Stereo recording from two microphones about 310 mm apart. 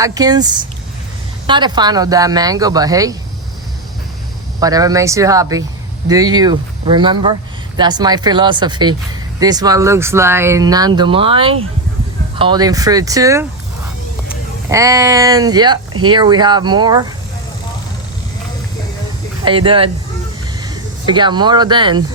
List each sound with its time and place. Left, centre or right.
0.0 s speech: centre
4.6 s speech: centre
14.7 s speech: centre
19.5 s speech: centre